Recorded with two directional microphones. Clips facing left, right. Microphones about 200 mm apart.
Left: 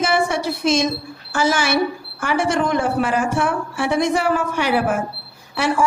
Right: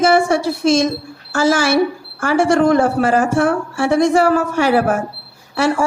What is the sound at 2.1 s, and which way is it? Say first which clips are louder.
A woman's voice: right 6 dB; 40° right (ahead or behind).